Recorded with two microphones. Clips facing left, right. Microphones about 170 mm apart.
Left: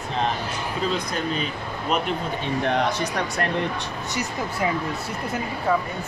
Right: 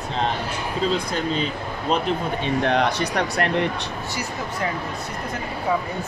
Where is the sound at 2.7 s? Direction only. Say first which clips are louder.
Even; 65° right (ahead or behind).